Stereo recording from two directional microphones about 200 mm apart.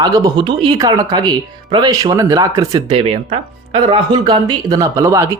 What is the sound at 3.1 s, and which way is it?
Speech, 30° right (ahead or behind).